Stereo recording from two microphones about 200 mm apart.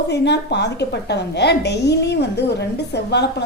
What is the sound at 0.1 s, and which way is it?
A woman's voice, 55° left (ahead or behind).